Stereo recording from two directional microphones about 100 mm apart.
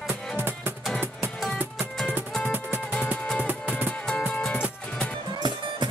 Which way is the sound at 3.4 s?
15° right (ahead or behind).